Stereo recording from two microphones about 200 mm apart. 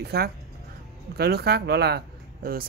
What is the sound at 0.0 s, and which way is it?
A man's voice, 50° right (ahead or behind).